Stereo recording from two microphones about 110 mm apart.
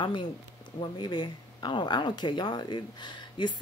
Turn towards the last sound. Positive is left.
turn(degrees=45)  # may be behind; listen again after turning